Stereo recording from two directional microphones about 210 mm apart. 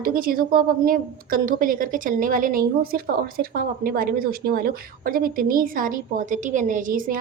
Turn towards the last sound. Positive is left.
turn(degrees=-40)  # may be behind; listen again after turning